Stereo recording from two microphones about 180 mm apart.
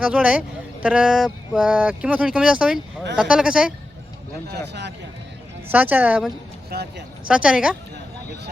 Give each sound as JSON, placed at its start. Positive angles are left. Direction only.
{"t": 0.0, "sound": "speech", "side_deg": -5}
{"t": 4.5, "sound": "speech", "side_deg": -70}
{"t": 5.6, "sound": "speech", "side_deg": -10}
{"t": 6.7, "sound": "speech", "side_deg": -65}
{"t": 7.3, "sound": "speech", "side_deg": -5}